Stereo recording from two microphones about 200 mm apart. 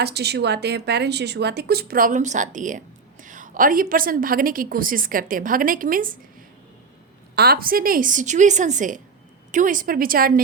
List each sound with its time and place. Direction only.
0.0 s speech: 55° right (ahead or behind)
7.3 s a woman's voice: 50° right (ahead or behind)